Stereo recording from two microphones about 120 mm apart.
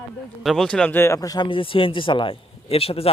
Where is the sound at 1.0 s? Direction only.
25° left (ahead or behind); by 3.1 s 55° left (ahead or behind).